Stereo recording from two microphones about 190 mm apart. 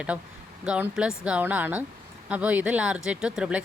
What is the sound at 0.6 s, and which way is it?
Speech, 5° right (ahead or behind).